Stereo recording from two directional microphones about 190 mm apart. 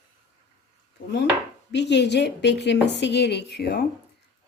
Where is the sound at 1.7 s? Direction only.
65° left (ahead or behind).